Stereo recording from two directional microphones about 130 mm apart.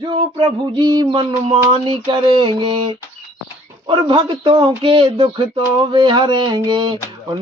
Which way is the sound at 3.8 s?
35° right (ahead or behind).